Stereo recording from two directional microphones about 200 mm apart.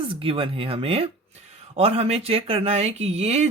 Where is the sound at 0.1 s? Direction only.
25° right (ahead or behind).